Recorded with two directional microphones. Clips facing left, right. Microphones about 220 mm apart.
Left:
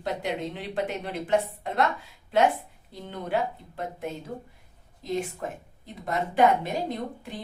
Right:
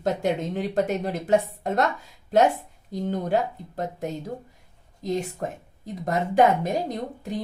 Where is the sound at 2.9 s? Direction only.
40° right (ahead or behind).